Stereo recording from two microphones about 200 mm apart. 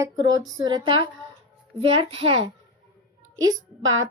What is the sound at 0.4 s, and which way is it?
Speech, 20° right (ahead or behind).